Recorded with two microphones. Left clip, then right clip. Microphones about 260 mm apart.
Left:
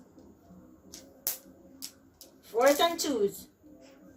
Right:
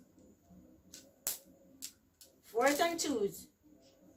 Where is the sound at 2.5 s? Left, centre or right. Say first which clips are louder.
Left 7 dB; centre.